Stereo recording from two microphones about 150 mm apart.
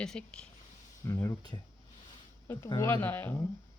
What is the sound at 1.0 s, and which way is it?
Speech, 20° left (ahead or behind).